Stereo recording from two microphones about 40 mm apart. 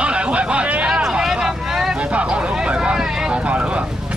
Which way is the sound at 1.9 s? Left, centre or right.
Right.